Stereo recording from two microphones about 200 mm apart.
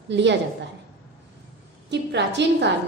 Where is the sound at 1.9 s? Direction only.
60° right (ahead or behind).